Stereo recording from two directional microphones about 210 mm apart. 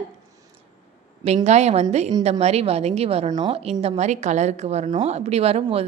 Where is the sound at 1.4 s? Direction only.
30° right (ahead or behind).